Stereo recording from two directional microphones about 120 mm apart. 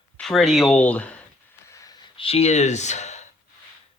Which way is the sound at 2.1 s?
55° left (ahead or behind).